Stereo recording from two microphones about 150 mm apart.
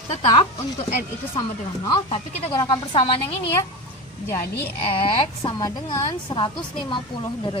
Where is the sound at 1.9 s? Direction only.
30° left (ahead or behind).